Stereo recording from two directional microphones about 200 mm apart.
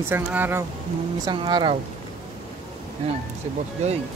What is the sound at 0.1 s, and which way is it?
Speech, 10° right (ahead or behind).